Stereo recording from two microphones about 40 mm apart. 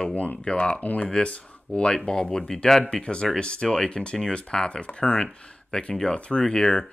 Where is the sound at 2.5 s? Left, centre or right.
Centre.